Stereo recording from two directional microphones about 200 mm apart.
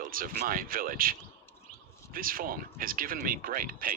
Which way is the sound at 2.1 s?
45° right (ahead or behind).